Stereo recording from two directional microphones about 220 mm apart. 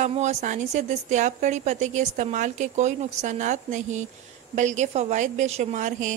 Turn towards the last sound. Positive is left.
turn(degrees=-35)  # may be behind; listen again after turning